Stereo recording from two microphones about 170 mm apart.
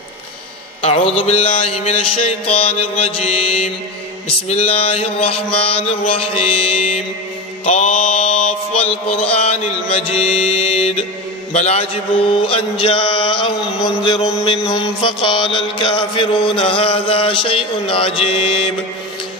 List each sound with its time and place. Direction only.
0.8 s mantra: 35° left (ahead or behind)
4.5 s mantra: 40° left (ahead or behind)